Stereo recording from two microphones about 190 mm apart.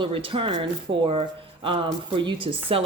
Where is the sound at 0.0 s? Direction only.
25° right (ahead or behind).